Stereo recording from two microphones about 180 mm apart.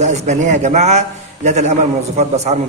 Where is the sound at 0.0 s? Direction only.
40° right (ahead or behind).